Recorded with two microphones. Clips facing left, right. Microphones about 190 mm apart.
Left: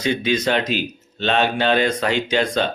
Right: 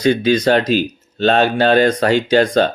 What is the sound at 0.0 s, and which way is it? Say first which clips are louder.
Speech: right 6 dB; 40° right (ahead or behind).